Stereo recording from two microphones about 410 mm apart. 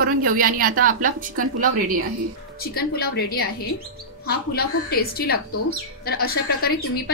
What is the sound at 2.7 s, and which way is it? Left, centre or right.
A woman's voice, left.